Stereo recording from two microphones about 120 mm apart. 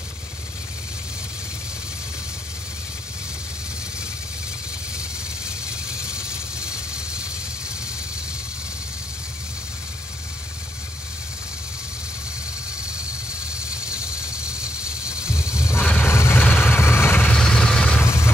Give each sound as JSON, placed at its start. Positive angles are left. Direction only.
{"t": 5.7, "sound": "vehicle", "side_deg": -5}
{"t": 13.7, "sound": "vehicle", "side_deg": -5}
{"t": 15.9, "sound": "vehicle", "side_deg": 20}
{"t": 17.4, "sound": "vehicle", "side_deg": 5}
{"t": 18.0, "sound": "vehicle", "side_deg": 25}